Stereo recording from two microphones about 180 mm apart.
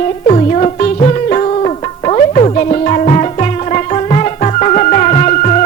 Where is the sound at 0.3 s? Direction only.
40° left (ahead or behind).